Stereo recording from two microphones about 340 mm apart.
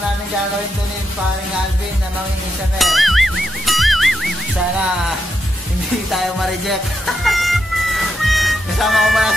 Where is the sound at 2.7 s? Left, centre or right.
Centre.